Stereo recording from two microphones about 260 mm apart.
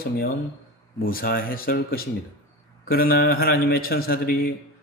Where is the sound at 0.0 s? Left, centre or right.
Left.